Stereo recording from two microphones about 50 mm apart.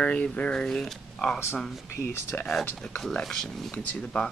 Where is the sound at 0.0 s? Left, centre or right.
Left.